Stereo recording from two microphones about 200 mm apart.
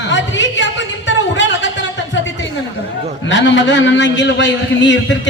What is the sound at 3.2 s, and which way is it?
A man's voice, 65° left (ahead or behind).